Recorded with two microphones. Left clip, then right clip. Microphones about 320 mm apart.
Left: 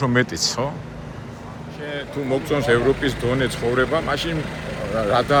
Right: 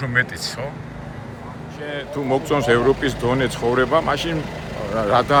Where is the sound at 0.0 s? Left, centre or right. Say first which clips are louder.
Left 1 dB; centre.